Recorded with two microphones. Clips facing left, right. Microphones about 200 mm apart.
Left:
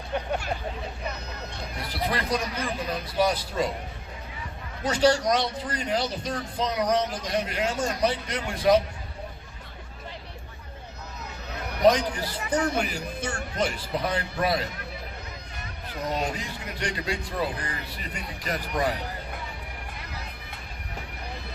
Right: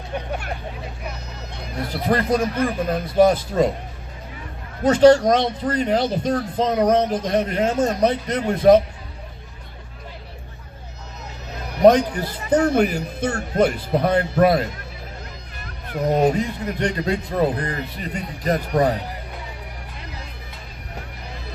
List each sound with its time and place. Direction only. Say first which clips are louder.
1.5 s speech: right 7 dB; 50° right (ahead or behind)
4.8 s speech: right 10 dB; 50° right (ahead or behind)
11.8 s speech: right 7 dB; 50° right (ahead or behind)
12.7 s a man's voice: right 9 dB; 55° right (ahead or behind)
15.9 s speech: right 11 dB; 50° right (ahead or behind)